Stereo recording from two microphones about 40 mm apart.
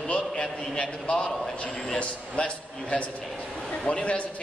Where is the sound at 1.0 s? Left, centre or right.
Left.